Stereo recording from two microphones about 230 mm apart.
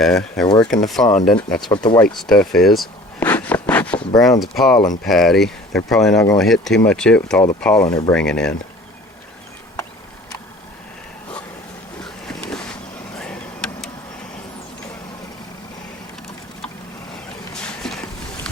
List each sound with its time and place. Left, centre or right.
0.0 s speech: centre
0.4 s speech: centre
1.1 s speech: left
1.4 s speech: centre
1.7 s speech: centre
2.0 s speech: centre
6.1 s speech: centre
6.4 s speech: centre
12.0 s vehicle: centre
17.5 s a sound: centre